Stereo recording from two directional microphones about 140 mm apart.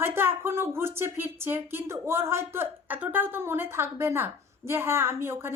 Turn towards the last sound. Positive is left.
turn(degrees=-15)  # may be behind; listen again after turning